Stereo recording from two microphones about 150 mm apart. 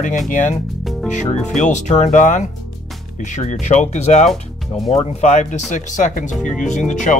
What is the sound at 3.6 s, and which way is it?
Speech, 50° left (ahead or behind).